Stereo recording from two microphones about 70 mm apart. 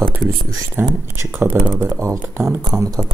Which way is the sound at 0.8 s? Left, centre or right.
Right.